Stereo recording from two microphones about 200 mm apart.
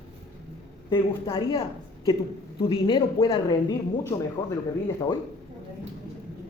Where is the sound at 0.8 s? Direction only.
25° left (ahead or behind).